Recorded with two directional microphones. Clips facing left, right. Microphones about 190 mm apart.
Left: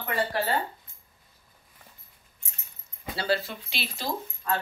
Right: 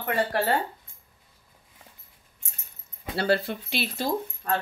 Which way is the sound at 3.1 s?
55° right (ahead or behind).